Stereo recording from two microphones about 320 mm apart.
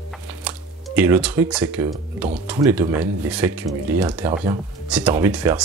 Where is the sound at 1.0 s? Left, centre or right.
Centre.